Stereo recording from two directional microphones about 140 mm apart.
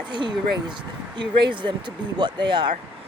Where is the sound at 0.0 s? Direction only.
35° right (ahead or behind).